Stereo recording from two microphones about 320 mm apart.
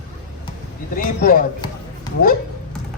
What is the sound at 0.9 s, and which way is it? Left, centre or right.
Speech, left.